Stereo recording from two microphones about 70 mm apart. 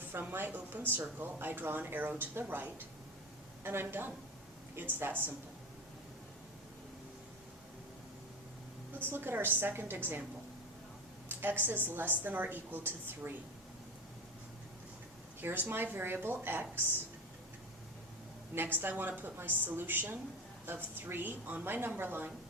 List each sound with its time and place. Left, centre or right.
0.1 s a woman's voice: right
9.0 s a woman's voice: right
11.3 s a woman's voice: right
15.4 s a woman's voice: right
18.5 s a woman's voice: right